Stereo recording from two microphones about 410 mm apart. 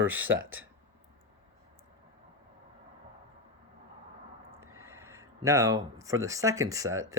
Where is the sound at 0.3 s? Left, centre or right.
Right.